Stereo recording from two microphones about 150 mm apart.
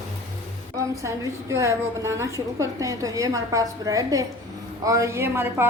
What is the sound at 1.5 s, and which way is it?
A woman's voice, 20° right (ahead or behind).